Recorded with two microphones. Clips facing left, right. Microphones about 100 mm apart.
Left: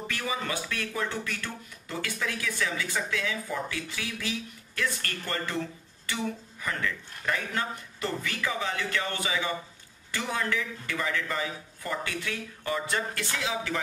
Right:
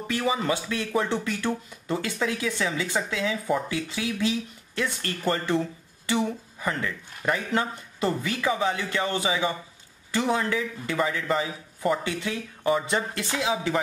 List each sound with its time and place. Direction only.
0.1 s speech: 20° right (ahead or behind)